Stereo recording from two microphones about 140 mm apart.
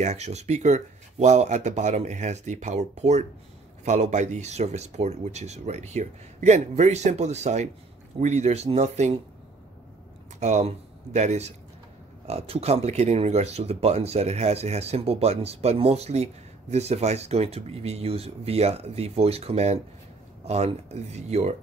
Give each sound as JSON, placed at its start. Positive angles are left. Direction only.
{"t": 0.0, "sound": "speech", "side_deg": -55}
{"t": 10.4, "sound": "speech", "side_deg": -55}